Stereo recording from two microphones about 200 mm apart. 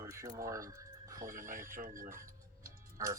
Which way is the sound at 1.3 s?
45° right (ahead or behind).